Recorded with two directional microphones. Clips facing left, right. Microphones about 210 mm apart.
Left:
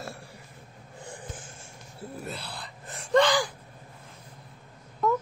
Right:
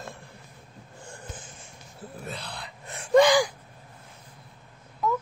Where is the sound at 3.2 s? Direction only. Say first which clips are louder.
Right 5 dB; 15° right (ahead or behind).